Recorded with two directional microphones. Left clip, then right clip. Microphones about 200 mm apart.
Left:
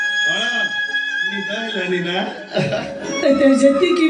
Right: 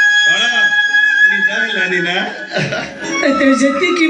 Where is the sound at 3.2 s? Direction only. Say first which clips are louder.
Even; 15° left (ahead or behind).